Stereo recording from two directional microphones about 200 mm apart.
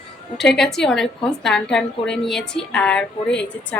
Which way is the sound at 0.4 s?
5° left (ahead or behind).